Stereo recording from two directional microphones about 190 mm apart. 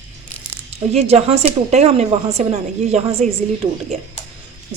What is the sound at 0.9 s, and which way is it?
A woman's voice, 35° right (ahead or behind).